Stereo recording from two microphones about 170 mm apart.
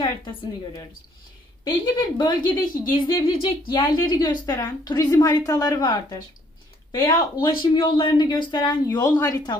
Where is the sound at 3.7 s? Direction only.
25° left (ahead or behind).